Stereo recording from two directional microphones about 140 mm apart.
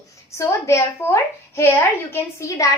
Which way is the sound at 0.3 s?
20° left (ahead or behind).